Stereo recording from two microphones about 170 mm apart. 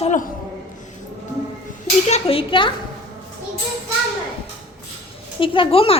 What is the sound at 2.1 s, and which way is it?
Speech, 40° left (ahead or behind).